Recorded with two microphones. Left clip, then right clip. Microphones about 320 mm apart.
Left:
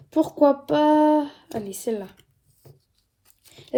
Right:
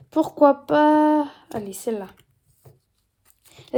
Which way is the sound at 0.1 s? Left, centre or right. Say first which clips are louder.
Right 2 dB; right.